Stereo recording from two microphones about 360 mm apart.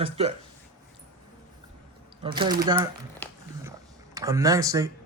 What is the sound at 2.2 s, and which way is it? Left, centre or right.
Speech, centre.